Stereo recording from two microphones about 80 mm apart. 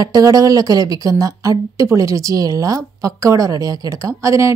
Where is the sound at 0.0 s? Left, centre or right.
Right.